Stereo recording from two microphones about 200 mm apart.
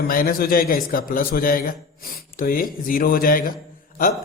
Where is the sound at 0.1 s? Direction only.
45° left (ahead or behind).